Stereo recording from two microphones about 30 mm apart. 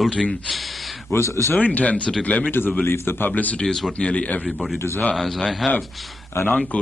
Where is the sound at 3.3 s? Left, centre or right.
Left.